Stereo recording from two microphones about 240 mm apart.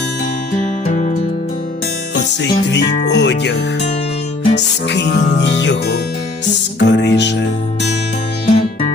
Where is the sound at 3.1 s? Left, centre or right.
Left.